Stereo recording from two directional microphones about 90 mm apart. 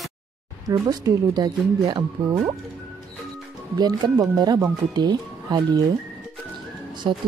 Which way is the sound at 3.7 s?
50° right (ahead or behind).